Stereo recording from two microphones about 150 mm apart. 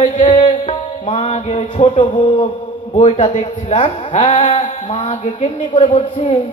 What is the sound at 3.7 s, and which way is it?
Music, 40° left (ahead or behind).